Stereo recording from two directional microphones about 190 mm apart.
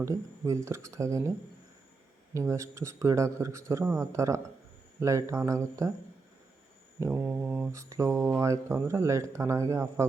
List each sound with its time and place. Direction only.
0.0 s speech: 15° right (ahead or behind)
2.3 s speech: 15° right (ahead or behind)
7.0 s speech: 10° right (ahead or behind)